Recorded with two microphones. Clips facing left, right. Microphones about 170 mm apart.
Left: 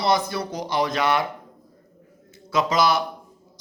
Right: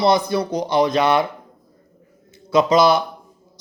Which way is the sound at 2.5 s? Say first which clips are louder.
Right 6 dB; 20° right (ahead or behind).